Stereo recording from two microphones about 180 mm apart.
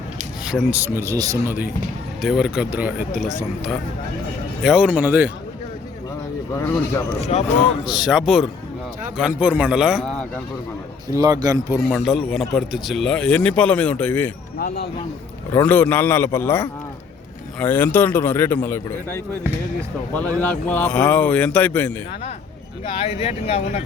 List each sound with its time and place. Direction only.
0.4 s speech: 5° right (ahead or behind)
4.6 s speech: 5° right (ahead or behind)
7.3 s speech: 35° left (ahead or behind)
7.9 s speech: 5° right (ahead or behind)
11.1 s speech: 20° right (ahead or behind)
11.9 s speech: 5° left (ahead or behind)
15.5 s speech: 10° left (ahead or behind)
22.9 s speech: 30° left (ahead or behind)